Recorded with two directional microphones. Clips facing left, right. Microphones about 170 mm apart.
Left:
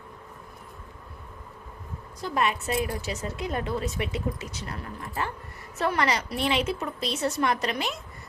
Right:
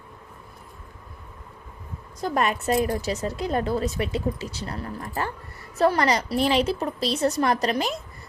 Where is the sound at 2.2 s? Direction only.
45° right (ahead or behind).